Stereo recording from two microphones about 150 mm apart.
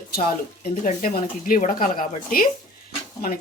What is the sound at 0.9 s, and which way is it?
Speech, 70° left (ahead or behind).